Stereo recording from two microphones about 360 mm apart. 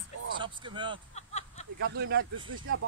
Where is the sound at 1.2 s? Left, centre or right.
Centre.